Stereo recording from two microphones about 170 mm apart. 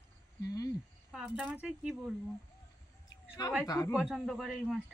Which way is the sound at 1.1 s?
5° right (ahead or behind).